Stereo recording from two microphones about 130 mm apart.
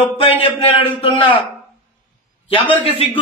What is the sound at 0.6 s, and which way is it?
Speech, 45° left (ahead or behind).